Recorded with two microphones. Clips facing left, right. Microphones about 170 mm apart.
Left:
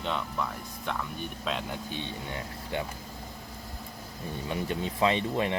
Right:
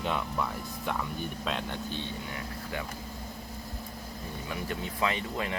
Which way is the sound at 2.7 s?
25° left (ahead or behind).